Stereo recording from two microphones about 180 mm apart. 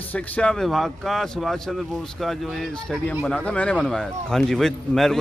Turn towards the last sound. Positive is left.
turn(degrees=0)  # may be behind; listen again after turning